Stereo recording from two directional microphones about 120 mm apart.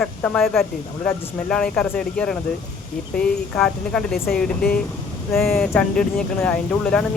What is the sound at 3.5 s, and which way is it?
Speech, 5° left (ahead or behind).